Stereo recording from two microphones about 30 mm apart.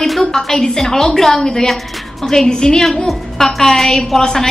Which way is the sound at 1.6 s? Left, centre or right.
Centre.